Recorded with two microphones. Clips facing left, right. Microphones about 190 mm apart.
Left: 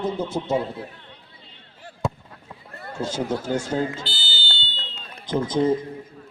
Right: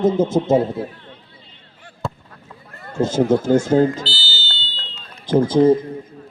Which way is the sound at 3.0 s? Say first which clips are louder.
Right 10 dB; 45° right (ahead or behind).